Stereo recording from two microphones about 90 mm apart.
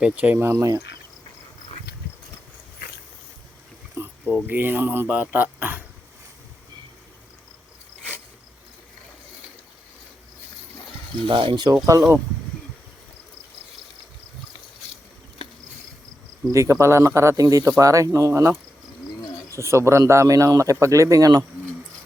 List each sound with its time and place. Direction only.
0.0 s speech: 20° right (ahead or behind)
0.6 s speech: 40° right (ahead or behind)
4.0 s a sound: 35° right (ahead or behind)
4.4 s speech: 20° right (ahead or behind)
11.3 s speech: 70° right (ahead or behind); by 11.8 s 50° right (ahead or behind)
11.9 s speech: 35° right (ahead or behind)
16.5 s speech: 35° right (ahead or behind)
19.2 s bird: 40° left (ahead or behind)
19.5 s speech: 30° right (ahead or behind)